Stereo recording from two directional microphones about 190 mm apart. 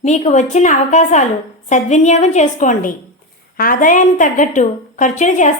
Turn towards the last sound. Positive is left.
turn(degrees=40)  # may be behind; listen again after turning